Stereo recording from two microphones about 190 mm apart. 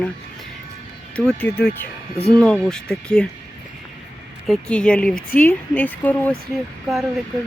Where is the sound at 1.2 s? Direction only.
5° left (ahead or behind).